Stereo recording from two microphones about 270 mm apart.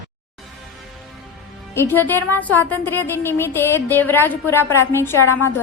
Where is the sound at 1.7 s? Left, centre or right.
Centre.